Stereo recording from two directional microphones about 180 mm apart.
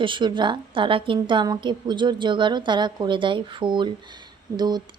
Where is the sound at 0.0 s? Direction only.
25° right (ahead or behind).